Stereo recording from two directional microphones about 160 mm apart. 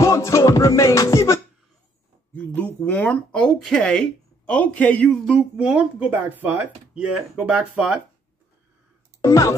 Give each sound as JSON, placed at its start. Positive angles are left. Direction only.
{"t": 0.0, "sound": "music", "side_deg": 20}
{"t": 2.3, "sound": "speech", "side_deg": 10}
{"t": 9.2, "sound": "speech", "side_deg": 20}